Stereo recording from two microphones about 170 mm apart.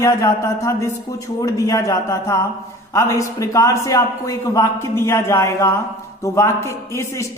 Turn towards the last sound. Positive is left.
turn(degrees=15)  # may be behind; listen again after turning